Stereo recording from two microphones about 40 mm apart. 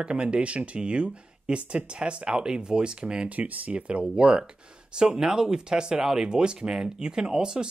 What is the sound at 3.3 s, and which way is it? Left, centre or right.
Speech, right.